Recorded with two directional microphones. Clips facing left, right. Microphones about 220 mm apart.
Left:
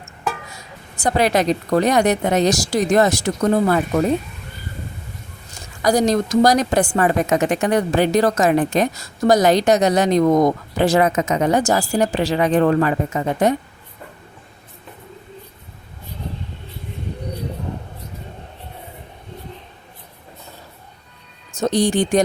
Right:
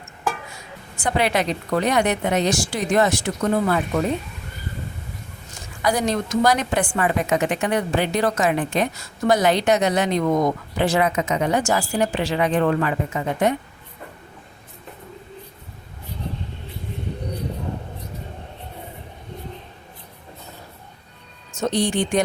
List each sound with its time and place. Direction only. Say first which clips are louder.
0.9 s speech: left 4 dB; 40° left (ahead or behind)
5.8 s speech: left 5 dB; 40° left (ahead or behind)
21.6 s speech: left 4 dB; 40° left (ahead or behind)